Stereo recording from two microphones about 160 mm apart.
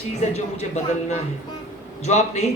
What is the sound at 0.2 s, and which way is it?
Speech, 45° left (ahead or behind).